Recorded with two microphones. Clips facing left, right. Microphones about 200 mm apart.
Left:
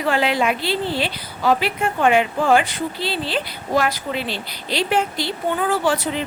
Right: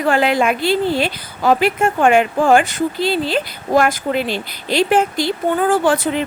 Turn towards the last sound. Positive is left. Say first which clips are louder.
# right 5 dB
turn(degrees=-50)  # may be behind; listen again after turning